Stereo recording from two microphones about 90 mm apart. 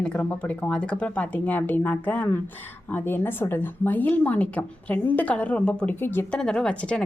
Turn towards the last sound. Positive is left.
turn(degrees=10)  # may be behind; listen again after turning